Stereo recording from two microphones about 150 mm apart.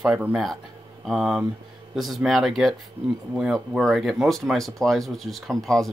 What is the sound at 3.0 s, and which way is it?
Speech, 35° right (ahead or behind).